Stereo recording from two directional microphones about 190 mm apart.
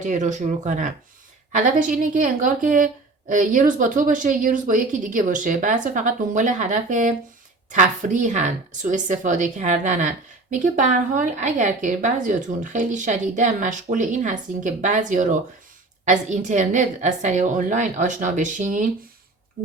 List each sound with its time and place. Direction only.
0.0 s a woman's voice: 40° right (ahead or behind)